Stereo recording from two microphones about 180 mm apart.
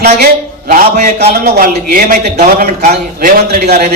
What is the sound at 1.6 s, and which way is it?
A man's voice, 50° right (ahead or behind).